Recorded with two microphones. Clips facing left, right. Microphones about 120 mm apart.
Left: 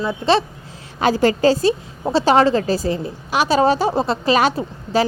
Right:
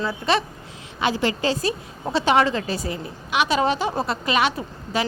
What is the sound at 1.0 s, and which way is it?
A woman's voice, 40° left (ahead or behind).